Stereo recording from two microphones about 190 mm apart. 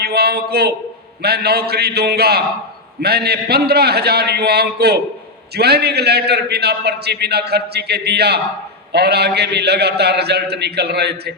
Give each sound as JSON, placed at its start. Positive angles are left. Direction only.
{"t": 0.0, "sound": "a man's voice", "side_deg": -55}